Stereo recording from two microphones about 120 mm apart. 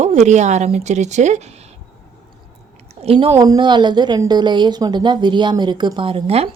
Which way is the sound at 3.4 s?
35° right (ahead or behind).